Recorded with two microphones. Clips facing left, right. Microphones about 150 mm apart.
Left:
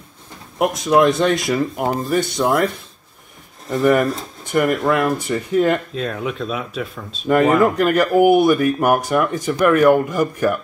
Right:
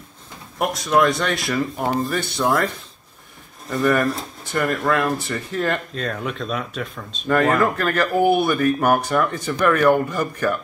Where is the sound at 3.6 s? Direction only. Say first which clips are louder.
Left 3 dB; 20° left (ahead or behind).